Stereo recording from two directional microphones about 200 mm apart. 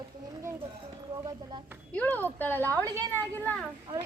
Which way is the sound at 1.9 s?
10° left (ahead or behind).